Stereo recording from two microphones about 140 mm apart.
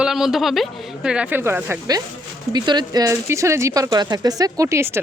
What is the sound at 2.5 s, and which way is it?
Speech, 30° right (ahead or behind).